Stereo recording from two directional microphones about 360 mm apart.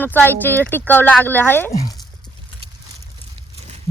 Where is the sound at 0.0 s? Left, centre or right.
Centre.